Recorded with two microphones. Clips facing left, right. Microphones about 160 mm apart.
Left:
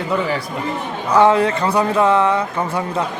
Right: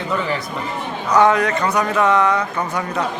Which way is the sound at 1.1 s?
30° left (ahead or behind).